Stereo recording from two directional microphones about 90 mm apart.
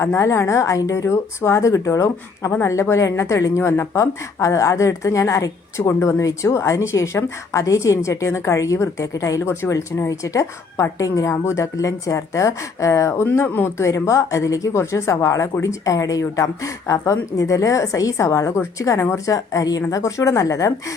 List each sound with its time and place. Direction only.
0.0 s speech: 30° left (ahead or behind)